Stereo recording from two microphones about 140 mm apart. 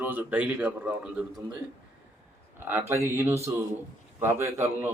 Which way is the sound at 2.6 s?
15° right (ahead or behind).